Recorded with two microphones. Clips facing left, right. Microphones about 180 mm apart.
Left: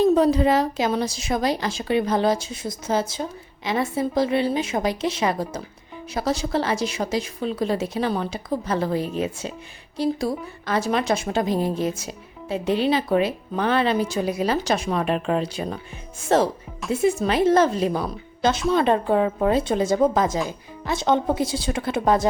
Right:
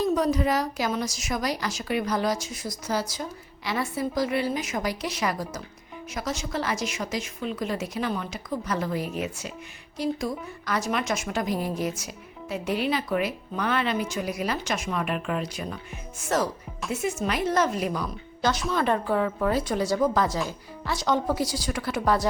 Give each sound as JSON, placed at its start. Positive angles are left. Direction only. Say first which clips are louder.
{"t": 0.0, "sound": "a woman's voice", "louder": "left 6 dB", "side_deg": 30}